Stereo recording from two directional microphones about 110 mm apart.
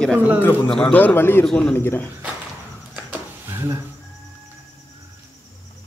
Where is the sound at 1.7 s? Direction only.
20° left (ahead or behind).